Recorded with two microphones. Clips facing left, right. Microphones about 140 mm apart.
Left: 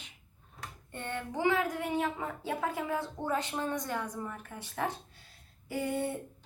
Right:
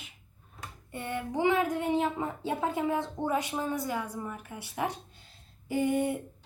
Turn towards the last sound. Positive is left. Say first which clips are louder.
# right 5 dB
turn(degrees=-15)  # may be behind; listen again after turning